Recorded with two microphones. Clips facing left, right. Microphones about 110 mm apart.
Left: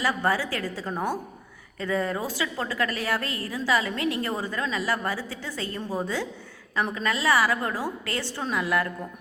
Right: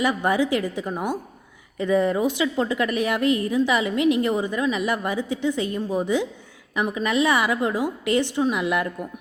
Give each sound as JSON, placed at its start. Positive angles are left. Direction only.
{"t": 0.0, "sound": "a woman's voice", "side_deg": -20}